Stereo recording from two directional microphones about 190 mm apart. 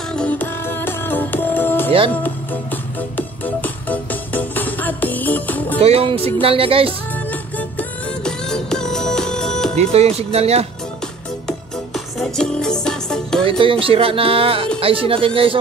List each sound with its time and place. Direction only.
0.1 s music: 5° left (ahead or behind)
1.9 s speech: 30° right (ahead or behind)
2.2 s music: 10° left (ahead or behind)
5.8 s speech: 30° right (ahead or behind)
7.2 s music: 10° left (ahead or behind)
9.8 s speech: 35° right (ahead or behind)
11.4 s music: centre (ahead or behind)
13.5 s speech: 25° right (ahead or behind)